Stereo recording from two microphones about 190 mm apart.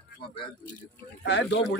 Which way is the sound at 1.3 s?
70° left (ahead or behind).